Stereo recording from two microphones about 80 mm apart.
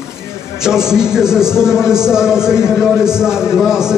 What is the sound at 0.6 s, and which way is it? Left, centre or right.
A man's voice, centre.